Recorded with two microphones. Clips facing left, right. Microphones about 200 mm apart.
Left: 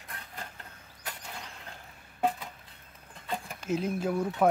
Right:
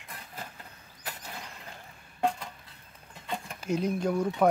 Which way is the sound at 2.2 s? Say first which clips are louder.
Even; 5° left (ahead or behind).